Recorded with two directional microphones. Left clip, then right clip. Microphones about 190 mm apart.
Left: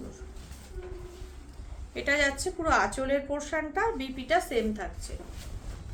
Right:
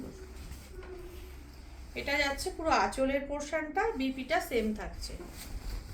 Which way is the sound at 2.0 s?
40° left (ahead or behind).